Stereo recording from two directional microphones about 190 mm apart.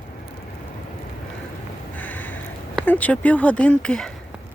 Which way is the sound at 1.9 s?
10° left (ahead or behind).